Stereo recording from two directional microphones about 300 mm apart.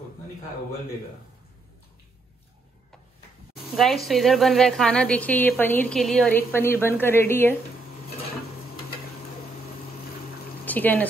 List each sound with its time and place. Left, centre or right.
3.7 s a woman's voice: centre
10.6 s speech: centre